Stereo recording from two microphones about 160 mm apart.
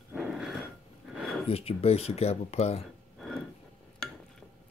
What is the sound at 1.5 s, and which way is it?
Speech, 40° left (ahead or behind).